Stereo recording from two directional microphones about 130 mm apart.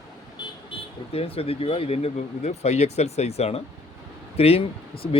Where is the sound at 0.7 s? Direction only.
50° left (ahead or behind).